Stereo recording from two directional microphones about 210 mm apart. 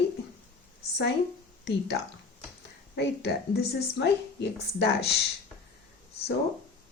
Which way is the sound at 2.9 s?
50° left (ahead or behind).